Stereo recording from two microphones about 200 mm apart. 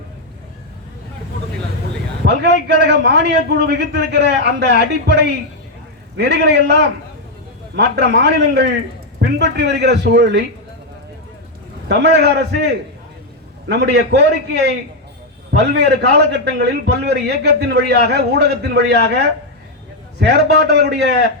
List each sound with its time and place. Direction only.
2.2 s a man's voice: 55° right (ahead or behind)
11.9 s a man's voice: 55° right (ahead or behind)